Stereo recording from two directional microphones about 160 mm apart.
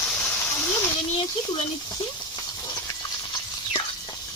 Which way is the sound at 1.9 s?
25° left (ahead or behind).